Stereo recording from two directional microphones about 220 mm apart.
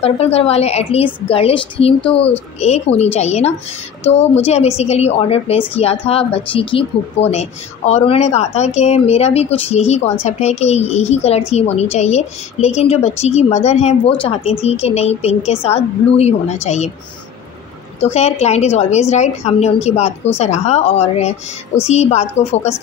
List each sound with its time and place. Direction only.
0.0 s a woman's voice: 25° left (ahead or behind)
18.0 s a woman's voice: 30° left (ahead or behind)